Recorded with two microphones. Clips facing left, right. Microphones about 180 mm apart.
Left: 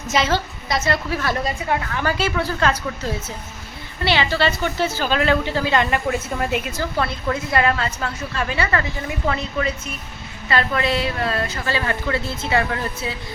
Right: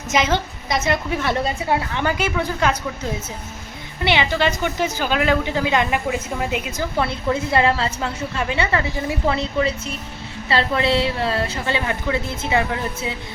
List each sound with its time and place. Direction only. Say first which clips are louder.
0.1 s a woman's voice: right 1 dB; 20° right (ahead or behind)
4.0 s a woman's voice: even; 15° right (ahead or behind)